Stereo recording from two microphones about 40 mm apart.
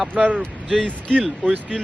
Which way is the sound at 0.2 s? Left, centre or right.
Right.